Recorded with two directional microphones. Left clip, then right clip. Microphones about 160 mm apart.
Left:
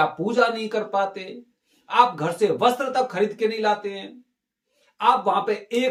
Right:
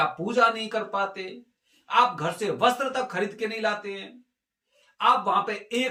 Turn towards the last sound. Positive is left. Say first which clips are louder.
# left 3 dB
turn(degrees=20)  # may be behind; listen again after turning